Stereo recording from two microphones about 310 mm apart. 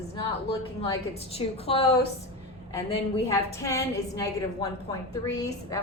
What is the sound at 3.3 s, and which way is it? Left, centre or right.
A woman's voice, centre.